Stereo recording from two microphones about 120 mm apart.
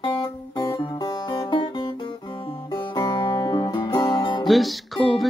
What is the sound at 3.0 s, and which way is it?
Music, 40° left (ahead or behind).